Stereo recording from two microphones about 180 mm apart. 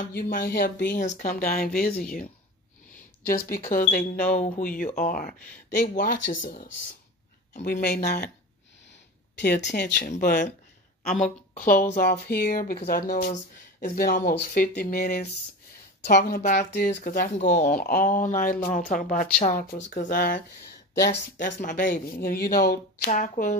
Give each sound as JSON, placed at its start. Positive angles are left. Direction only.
{"t": 0.0, "sound": "speech", "side_deg": 50}
{"t": 7.6, "sound": "speech", "side_deg": 60}
{"t": 9.7, "sound": "speech", "side_deg": 70}
{"t": 10.0, "sound": "speech", "side_deg": 50}
{"t": 17.6, "sound": "speech", "side_deg": 55}
{"t": 21.5, "sound": "speech", "side_deg": 45}